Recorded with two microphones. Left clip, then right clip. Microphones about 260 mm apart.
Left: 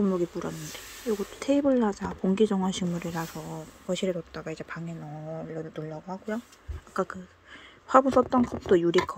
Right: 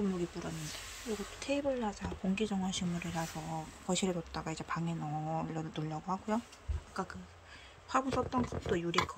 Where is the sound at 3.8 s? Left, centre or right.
Centre.